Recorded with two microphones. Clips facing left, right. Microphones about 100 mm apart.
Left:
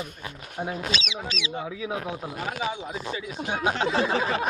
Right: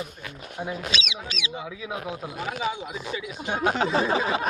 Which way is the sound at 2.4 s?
40° left (ahead or behind).